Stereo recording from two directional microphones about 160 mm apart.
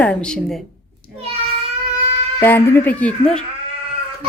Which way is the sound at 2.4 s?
15° left (ahead or behind).